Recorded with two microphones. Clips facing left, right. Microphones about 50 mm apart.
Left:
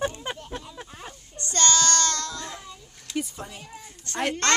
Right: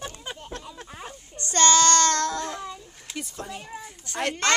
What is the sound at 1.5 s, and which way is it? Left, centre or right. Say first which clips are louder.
Child singing: right 5 dB; right.